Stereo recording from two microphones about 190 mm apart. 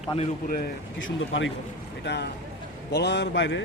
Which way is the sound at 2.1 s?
65° left (ahead or behind).